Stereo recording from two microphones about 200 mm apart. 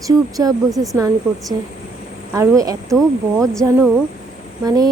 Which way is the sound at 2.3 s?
15° right (ahead or behind).